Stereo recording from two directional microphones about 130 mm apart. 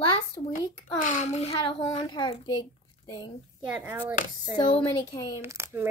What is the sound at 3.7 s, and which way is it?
Speech, 15° right (ahead or behind).